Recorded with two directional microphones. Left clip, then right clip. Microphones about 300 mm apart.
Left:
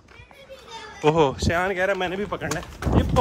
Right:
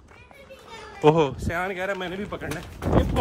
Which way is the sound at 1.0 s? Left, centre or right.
Centre.